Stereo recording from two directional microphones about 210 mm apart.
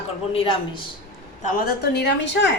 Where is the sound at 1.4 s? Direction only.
50° left (ahead or behind).